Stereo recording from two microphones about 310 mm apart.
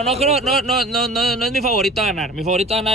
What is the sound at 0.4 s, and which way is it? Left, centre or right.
Speech, centre.